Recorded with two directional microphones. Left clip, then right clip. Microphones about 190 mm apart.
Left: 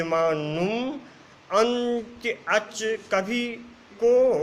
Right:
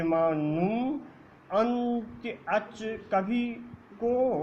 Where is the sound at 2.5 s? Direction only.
55° left (ahead or behind).